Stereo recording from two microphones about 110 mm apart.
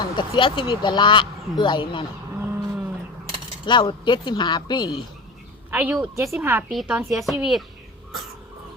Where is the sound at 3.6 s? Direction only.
45° left (ahead or behind).